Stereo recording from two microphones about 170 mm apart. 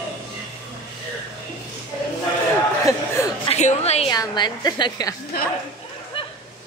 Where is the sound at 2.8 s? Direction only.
15° left (ahead or behind).